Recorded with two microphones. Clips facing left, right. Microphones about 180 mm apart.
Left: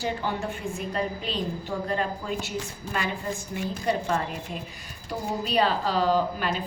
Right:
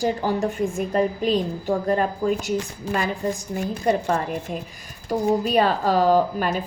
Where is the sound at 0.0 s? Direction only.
40° right (ahead or behind).